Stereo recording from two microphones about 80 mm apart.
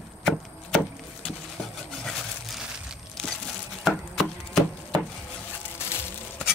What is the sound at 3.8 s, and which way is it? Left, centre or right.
Chopping, centre.